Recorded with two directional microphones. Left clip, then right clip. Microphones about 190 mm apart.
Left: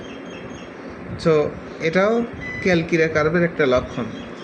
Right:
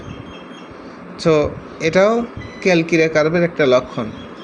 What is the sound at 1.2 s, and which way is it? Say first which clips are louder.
A woman's voice: right 3 dB; 30° right (ahead or behind).